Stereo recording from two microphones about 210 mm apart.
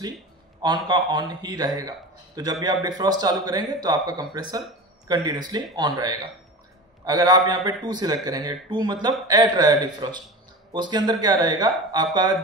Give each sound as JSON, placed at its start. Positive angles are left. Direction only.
{"t": 0.6, "sound": "a man's voice", "side_deg": -20}